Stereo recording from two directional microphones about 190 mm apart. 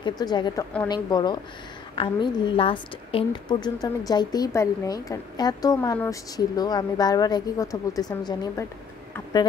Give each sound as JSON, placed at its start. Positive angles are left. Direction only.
{"t": 0.0, "sound": "a woman's voice", "side_deg": 20}